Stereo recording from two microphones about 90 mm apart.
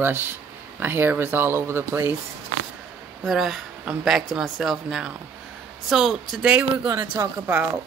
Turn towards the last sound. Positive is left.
turn(degrees=-25)  # may be behind; listen again after turning